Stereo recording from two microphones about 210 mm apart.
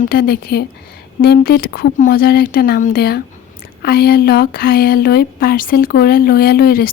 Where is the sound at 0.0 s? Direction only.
45° left (ahead or behind).